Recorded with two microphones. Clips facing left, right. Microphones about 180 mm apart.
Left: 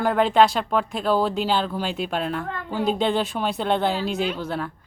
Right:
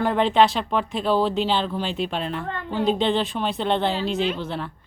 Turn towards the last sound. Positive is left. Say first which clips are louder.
# even
turn(degrees=5)  # may be behind; listen again after turning